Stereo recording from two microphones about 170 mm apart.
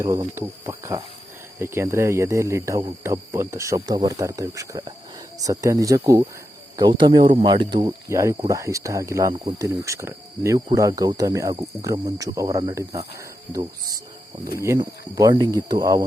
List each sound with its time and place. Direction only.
0.0 s speech: 20° right (ahead or behind)
13.5 s cricket: 20° right (ahead or behind)
14.8 s speech: 20° right (ahead or behind)